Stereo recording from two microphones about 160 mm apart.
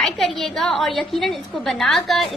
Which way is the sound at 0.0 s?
Centre (ahead or behind).